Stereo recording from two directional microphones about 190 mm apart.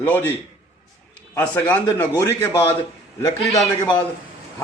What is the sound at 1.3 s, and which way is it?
A man's voice, 10° left (ahead or behind).